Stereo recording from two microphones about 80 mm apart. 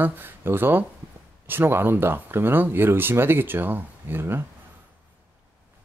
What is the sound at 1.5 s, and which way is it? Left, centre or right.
Speech, right.